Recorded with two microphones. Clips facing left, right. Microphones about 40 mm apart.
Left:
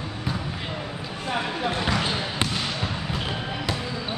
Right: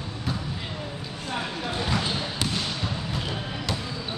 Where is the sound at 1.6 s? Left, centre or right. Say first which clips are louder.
Left 2 dB; left.